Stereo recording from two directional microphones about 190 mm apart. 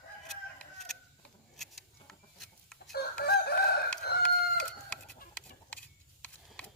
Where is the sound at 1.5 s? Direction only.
Centre (ahead or behind).